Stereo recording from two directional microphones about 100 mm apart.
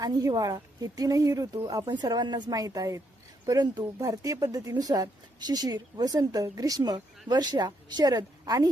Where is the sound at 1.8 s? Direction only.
45° right (ahead or behind).